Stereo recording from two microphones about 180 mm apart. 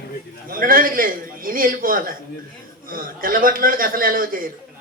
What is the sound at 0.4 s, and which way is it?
A man's voice, 50° right (ahead or behind).